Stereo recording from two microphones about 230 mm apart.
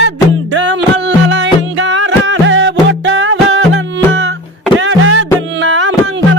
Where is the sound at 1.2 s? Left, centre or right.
Right.